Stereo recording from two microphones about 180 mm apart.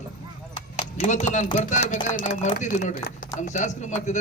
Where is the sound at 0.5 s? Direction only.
40° left (ahead or behind).